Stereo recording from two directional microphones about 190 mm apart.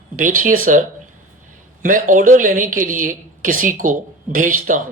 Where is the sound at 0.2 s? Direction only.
45° right (ahead or behind).